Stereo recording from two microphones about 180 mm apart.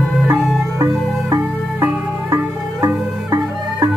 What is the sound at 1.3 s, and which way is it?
Music, 15° right (ahead or behind).